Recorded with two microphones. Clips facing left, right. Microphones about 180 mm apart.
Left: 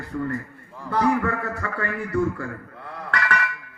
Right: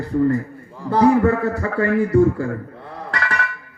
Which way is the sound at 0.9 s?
30° right (ahead or behind).